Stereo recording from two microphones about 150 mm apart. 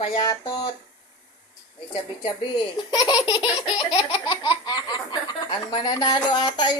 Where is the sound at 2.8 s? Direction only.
30° left (ahead or behind).